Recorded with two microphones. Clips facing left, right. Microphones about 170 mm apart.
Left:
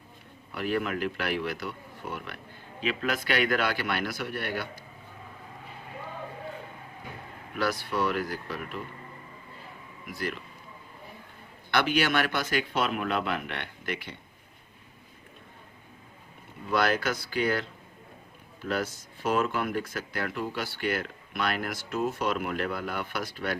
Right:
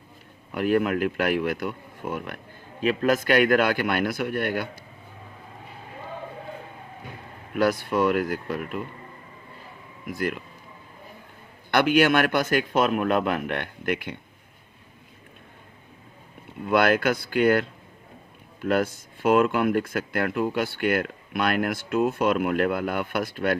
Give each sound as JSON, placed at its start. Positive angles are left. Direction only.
{"t": 0.5, "sound": "a man's voice", "side_deg": -50}
{"t": 7.6, "sound": "a man's voice", "side_deg": -50}
{"t": 10.1, "sound": "a man's voice", "side_deg": -50}
{"t": 11.7, "sound": "a man's voice", "side_deg": -50}
{"t": 16.6, "sound": "speech", "side_deg": -60}
{"t": 18.7, "sound": "speech", "side_deg": -55}